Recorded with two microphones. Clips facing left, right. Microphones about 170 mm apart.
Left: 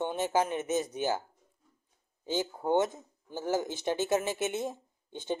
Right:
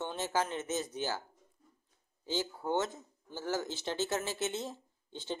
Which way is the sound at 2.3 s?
15° left (ahead or behind).